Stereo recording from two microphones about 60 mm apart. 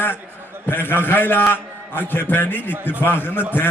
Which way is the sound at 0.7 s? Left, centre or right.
Left.